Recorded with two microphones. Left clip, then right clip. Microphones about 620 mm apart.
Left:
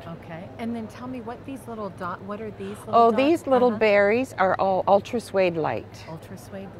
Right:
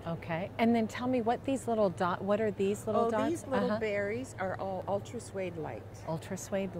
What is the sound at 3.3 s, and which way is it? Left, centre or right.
A woman's voice, left.